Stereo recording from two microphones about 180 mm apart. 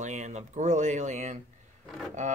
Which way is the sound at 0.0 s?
40° right (ahead or behind).